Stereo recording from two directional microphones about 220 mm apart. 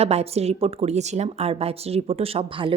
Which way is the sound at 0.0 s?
30° right (ahead or behind).